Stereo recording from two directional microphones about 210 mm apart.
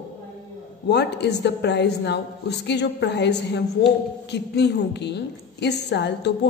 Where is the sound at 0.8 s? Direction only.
55° left (ahead or behind).